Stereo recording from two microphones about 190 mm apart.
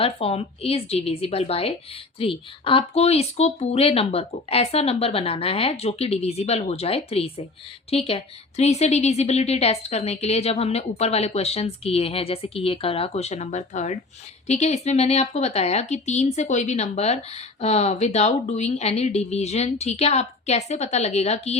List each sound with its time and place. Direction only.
0.0 s speech: 30° left (ahead or behind)